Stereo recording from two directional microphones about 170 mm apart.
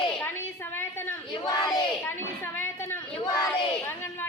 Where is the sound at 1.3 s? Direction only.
25° left (ahead or behind).